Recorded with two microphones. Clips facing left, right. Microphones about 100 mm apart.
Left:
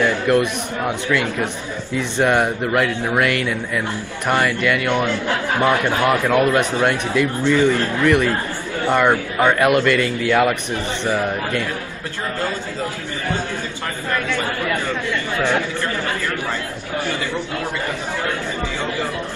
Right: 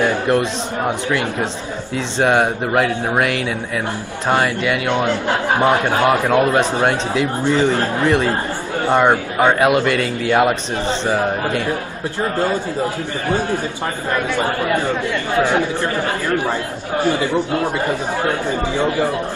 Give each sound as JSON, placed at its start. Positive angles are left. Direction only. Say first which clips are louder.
{"t": 0.0, "sound": "a man's voice", "louder": "even", "side_deg": -20}
{"t": 14.1, "sound": "a man's voice", "louder": "right 3 dB", "side_deg": -20}
{"t": 17.5, "sound": "speech", "louder": "right 6 dB", "side_deg": -30}